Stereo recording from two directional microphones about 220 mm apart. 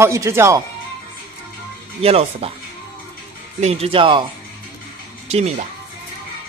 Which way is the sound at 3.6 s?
25° right (ahead or behind).